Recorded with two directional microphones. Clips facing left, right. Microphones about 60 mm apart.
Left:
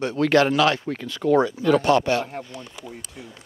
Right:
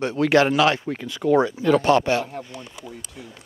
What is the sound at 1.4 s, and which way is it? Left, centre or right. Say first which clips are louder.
Speech: even; right.